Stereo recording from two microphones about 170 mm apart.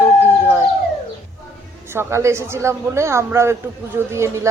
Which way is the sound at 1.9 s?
15° right (ahead or behind).